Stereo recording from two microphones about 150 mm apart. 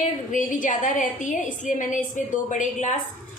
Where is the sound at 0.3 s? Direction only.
60° left (ahead or behind).